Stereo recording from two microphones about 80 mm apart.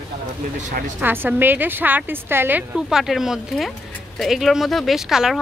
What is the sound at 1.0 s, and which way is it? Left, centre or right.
A woman's voice, right.